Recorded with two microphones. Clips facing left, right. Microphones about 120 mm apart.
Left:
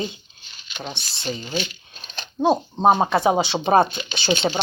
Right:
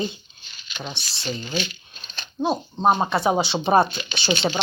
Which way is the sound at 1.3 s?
5° left (ahead or behind).